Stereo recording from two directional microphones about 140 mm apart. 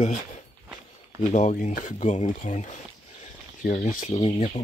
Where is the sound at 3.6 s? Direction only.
80° left.